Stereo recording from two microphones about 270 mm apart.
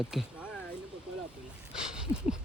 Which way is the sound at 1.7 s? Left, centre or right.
Centre.